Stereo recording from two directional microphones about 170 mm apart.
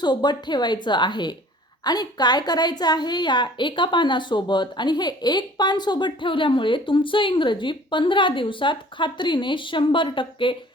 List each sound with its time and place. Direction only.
0.0 s a woman's voice: 25° left (ahead or behind)